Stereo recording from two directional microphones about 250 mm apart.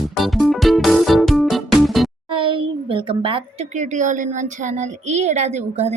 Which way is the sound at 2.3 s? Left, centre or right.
Centre.